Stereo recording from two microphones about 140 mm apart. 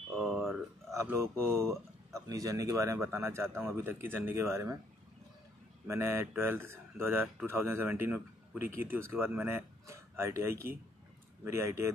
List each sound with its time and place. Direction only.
0.9 s speech: 20° right (ahead or behind)
5.9 s speech: 20° right (ahead or behind)